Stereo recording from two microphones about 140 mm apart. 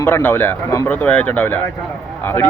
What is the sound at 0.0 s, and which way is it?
Speech, 15° left (ahead or behind).